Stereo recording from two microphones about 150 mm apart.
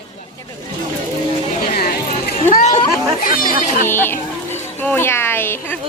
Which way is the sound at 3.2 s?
70° left (ahead or behind).